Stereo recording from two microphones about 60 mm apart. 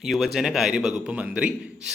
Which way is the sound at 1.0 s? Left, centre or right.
Right.